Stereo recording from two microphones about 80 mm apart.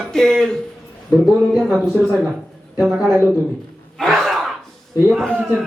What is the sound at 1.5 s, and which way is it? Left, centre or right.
Speech, centre.